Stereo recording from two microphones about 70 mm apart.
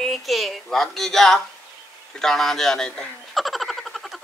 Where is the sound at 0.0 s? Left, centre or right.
Centre.